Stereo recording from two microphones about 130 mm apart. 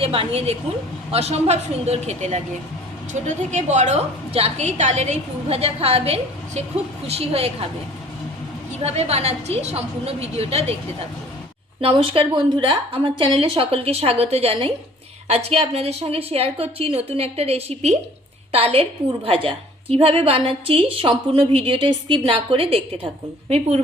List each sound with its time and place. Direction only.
0.0 s a woman's voice: 45° right (ahead or behind)
8.8 s a woman's voice: 55° right (ahead or behind)
11.8 s a woman's voice: 45° right (ahead or behind)